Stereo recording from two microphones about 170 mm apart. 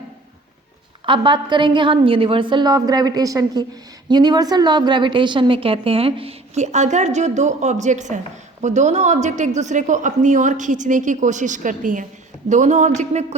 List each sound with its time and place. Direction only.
1.0 s a woman's voice: 30° right (ahead or behind)